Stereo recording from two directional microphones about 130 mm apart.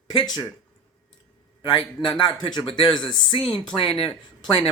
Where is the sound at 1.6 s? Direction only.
40° left (ahead or behind).